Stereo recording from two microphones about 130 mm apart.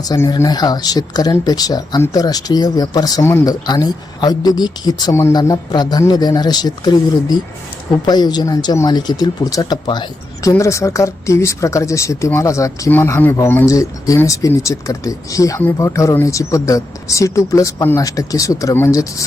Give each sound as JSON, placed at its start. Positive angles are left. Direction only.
{"t": 0.3, "sound": "speech", "side_deg": 30}
{"t": 10.5, "sound": "speech", "side_deg": 25}